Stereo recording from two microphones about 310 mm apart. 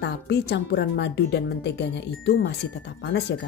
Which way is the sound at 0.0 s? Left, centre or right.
Left.